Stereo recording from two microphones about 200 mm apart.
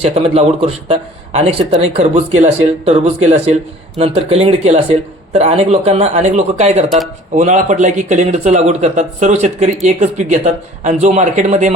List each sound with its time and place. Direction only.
0.0 s a man's voice: 30° right (ahead or behind)